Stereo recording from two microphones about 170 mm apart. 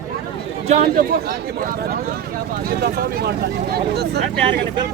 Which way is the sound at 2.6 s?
65° right (ahead or behind).